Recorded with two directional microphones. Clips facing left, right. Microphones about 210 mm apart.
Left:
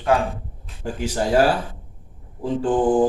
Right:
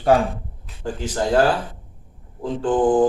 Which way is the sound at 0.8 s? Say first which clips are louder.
Even; 10° left (ahead or behind).